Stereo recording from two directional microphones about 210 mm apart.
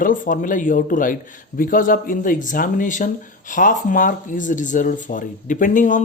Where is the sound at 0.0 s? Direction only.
40° left (ahead or behind).